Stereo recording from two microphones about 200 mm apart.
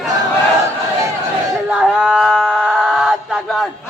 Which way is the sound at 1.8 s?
5° right (ahead or behind).